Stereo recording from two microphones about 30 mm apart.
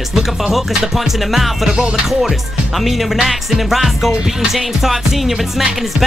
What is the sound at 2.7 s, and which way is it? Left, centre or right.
Music, centre.